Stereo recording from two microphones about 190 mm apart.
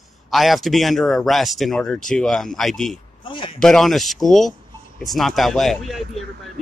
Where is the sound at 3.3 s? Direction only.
25° left (ahead or behind).